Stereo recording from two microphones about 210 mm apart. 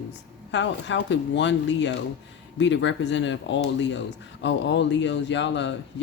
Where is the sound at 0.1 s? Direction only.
60° left (ahead or behind).